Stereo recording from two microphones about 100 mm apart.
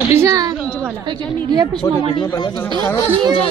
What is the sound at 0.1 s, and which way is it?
Speech, 30° right (ahead or behind).